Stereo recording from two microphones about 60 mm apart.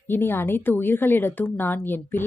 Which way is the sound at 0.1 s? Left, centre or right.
Left.